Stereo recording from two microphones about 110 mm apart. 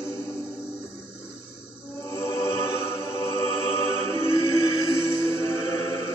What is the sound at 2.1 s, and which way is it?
Music, 25° left (ahead or behind).